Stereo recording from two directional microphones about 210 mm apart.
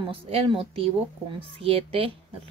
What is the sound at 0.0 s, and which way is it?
Speech, 25° right (ahead or behind).